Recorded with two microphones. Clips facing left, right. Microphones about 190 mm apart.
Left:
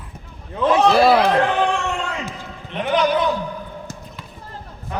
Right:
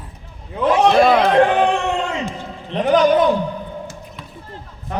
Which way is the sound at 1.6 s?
20° right (ahead or behind).